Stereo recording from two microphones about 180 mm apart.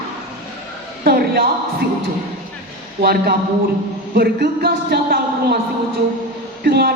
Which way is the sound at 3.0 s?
60° right (ahead or behind).